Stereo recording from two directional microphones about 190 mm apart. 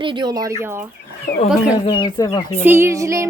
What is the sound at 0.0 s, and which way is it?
Speech, 25° right (ahead or behind).